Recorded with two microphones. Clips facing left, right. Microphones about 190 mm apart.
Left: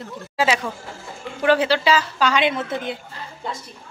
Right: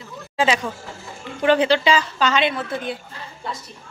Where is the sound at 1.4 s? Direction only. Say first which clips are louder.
Right 1 dB; 5° left (ahead or behind).